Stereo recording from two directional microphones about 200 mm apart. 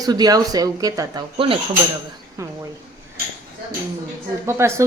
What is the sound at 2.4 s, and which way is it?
Speech, 15° right (ahead or behind).